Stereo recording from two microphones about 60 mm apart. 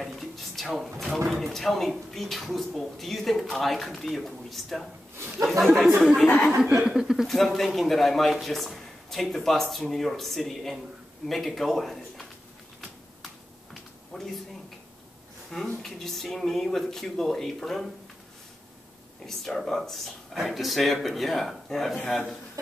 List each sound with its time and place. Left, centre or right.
0.0 s a sound: centre
0.9 s speech: centre
6.2 s speech: left
6.9 s speech: centre
7.2 s speech: centre
14.1 s speech: centre
15.5 s speech: centre
19.2 s speech: centre